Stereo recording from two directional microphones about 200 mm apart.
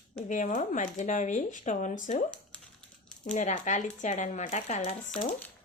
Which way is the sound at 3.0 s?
5° left (ahead or behind).